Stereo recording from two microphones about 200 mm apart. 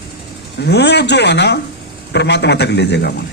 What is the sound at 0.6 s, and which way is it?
A man's voice, 55° left (ahead or behind).